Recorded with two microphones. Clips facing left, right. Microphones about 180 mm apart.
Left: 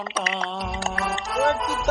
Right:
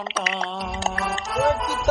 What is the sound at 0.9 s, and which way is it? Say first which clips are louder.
Music: right 2 dB; centre (ahead or behind).